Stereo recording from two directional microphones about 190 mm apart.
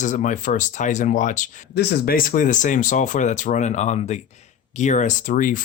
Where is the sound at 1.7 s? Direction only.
50° left (ahead or behind).